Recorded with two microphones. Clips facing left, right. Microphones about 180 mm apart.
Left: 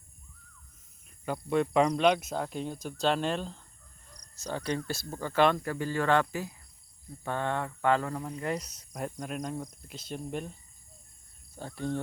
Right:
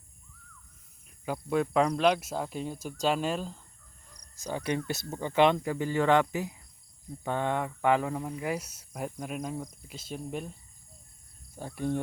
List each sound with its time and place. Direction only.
1.2 s speech: 5° right (ahead or behind)
11.5 s speech: 10° right (ahead or behind)